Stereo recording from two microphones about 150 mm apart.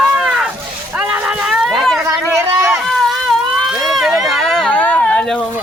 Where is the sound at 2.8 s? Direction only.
Centre (ahead or behind).